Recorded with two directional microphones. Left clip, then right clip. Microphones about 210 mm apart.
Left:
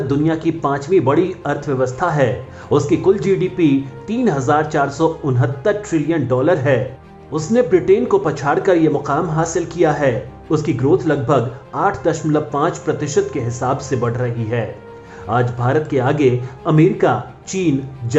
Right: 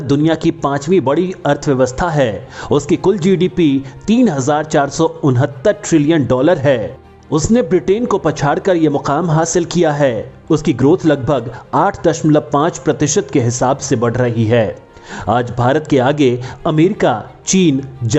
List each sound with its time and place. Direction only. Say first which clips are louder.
0.1 s speech: right 6 dB; 40° right (ahead or behind)